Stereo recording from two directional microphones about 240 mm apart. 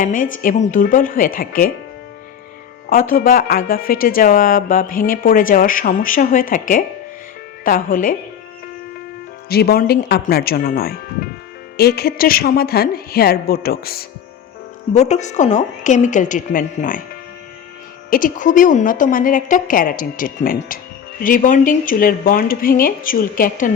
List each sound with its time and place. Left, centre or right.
0.0 s speech: left
2.9 s speech: left
9.5 s speech: left
14.9 s speech: left
18.1 s speech: left